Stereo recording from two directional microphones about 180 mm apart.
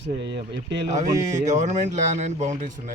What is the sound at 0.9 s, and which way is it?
Speech, 40° right (ahead or behind).